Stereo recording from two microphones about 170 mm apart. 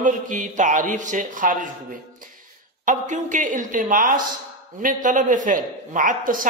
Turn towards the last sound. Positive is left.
turn(degrees=-55)  # may be behind; listen again after turning